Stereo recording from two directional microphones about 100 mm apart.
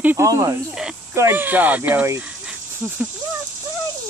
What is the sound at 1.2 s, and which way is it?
Speech, 20° right (ahead or behind).